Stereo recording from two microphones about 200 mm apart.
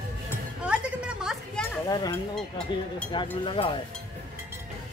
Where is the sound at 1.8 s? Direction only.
20° left (ahead or behind).